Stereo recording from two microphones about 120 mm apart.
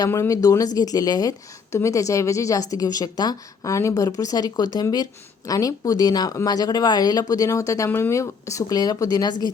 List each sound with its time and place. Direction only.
0.0 s a woman's voice: 25° left (ahead or behind)